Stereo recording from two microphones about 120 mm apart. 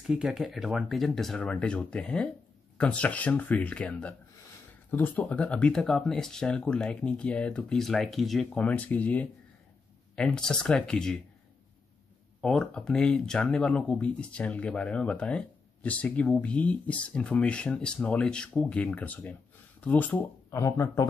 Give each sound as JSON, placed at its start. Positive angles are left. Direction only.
{"t": 0.0, "sound": "speech", "side_deg": -5}
{"t": 12.4, "sound": "speech", "side_deg": 5}
{"t": 20.5, "sound": "speech", "side_deg": 25}